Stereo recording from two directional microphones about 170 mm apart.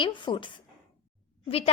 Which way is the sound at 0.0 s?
30° left (ahead or behind).